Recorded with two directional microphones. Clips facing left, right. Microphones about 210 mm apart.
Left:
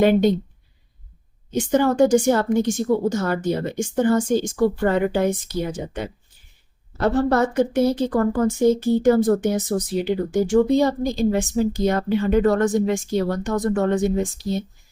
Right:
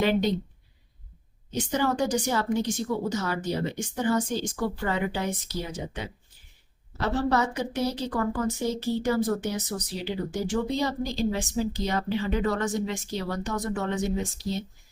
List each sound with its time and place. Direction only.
0.0 s a woman's voice: 50° left (ahead or behind)
1.5 s a woman's voice: 50° left (ahead or behind)